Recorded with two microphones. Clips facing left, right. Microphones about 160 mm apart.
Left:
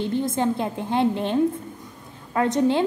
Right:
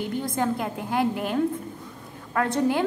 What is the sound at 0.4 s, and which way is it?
A woman's voice, 25° left (ahead or behind).